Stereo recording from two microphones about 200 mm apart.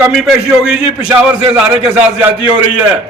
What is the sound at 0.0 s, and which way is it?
A man's voice, centre (ahead or behind).